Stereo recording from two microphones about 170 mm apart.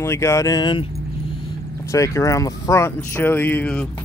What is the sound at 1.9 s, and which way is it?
Speech, 20° left (ahead or behind).